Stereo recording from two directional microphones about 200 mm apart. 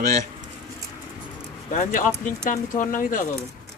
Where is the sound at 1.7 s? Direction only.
40° left (ahead or behind).